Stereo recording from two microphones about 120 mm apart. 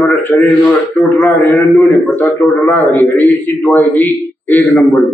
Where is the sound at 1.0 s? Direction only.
15° left (ahead or behind).